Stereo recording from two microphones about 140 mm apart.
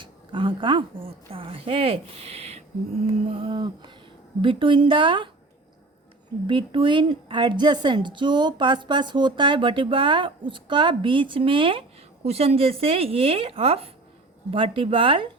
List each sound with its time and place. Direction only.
0.0 s a woman's voice: 35° right (ahead or behind)
6.5 s a woman's voice: 35° right (ahead or behind)